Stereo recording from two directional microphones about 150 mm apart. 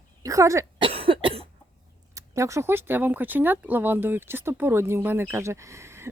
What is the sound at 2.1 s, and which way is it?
Speech, 20° right (ahead or behind).